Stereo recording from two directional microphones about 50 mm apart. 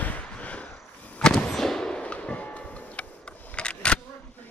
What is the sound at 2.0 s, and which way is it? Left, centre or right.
Music, left.